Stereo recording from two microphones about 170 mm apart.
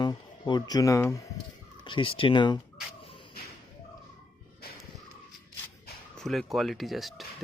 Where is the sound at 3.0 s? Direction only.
30° left (ahead or behind).